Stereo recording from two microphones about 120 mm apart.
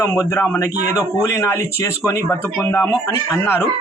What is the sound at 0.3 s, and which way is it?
A man's voice, 20° left (ahead or behind).